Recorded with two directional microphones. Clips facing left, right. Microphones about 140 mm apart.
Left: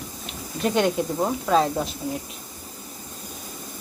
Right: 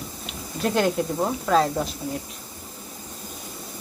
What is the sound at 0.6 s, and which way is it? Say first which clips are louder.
Speech: even; centre (ahead or behind).